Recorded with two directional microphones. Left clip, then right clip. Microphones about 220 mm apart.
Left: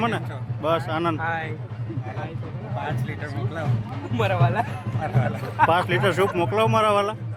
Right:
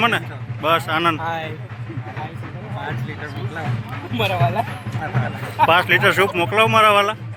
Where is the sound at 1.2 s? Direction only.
50° right (ahead or behind).